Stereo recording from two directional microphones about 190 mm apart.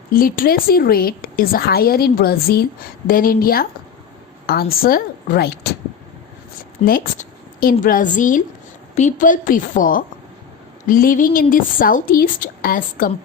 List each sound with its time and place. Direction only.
0.1 s a woman's voice: 50° left (ahead or behind)
6.8 s a woman's voice: 50° left (ahead or behind)